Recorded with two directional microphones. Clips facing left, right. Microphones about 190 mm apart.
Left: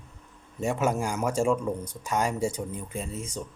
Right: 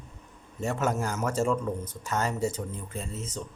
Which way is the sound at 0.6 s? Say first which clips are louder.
Left 2 dB; 15° left (ahead or behind).